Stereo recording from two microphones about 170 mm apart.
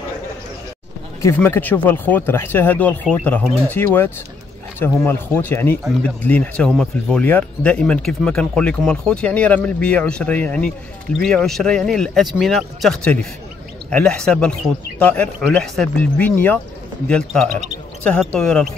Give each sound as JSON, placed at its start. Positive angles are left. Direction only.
{"t": 1.2, "sound": "speech", "side_deg": 15}